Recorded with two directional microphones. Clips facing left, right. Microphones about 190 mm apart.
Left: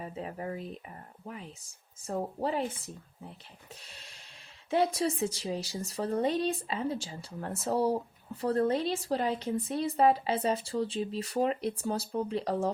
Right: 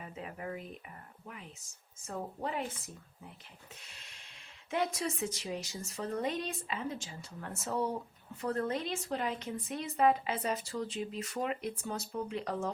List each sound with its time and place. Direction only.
0.0 s speech: 35° left (ahead or behind)